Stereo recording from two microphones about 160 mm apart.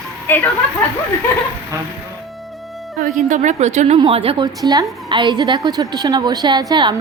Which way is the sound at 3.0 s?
50° right (ahead or behind).